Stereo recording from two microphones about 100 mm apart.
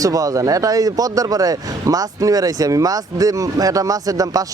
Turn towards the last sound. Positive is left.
turn(degrees=-35)  # may be behind; listen again after turning